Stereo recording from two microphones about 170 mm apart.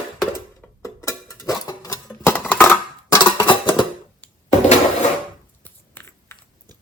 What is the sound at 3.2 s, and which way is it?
Music, 30° left (ahead or behind).